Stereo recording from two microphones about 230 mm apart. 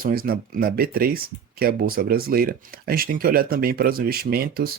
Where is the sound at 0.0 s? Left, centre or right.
Right.